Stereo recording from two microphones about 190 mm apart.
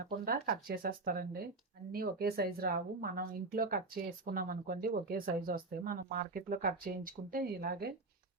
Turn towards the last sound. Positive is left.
turn(degrees=-50)  # may be behind; listen again after turning